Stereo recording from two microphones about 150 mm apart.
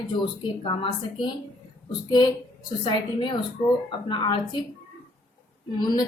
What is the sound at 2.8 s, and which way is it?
A woman's voice, 30° left (ahead or behind).